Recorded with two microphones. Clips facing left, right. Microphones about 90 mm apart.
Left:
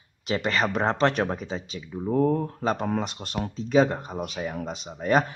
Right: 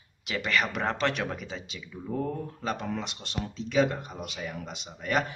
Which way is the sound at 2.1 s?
50° left (ahead or behind).